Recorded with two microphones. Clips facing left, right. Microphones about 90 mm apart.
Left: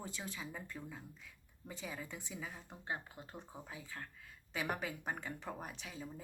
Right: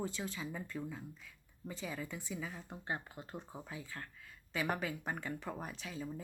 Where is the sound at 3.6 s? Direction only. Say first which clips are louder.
Right 2 dB; 10° left (ahead or behind).